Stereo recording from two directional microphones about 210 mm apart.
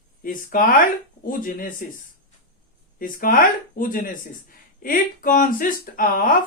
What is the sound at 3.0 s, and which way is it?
Speech, 40° left (ahead or behind).